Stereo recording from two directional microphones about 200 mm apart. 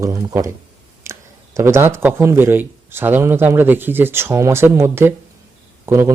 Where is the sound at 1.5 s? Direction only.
15° right (ahead or behind).